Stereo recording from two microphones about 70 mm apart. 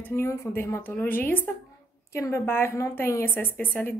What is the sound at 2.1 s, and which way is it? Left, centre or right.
A woman's voice, left.